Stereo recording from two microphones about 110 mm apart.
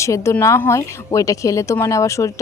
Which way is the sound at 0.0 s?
25° left (ahead or behind).